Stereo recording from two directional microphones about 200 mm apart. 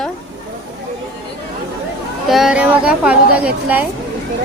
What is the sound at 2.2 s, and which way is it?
Speech, centre (ahead or behind).